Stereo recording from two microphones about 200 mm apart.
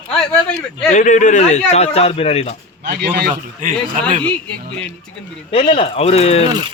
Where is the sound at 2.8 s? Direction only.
55° right (ahead or behind).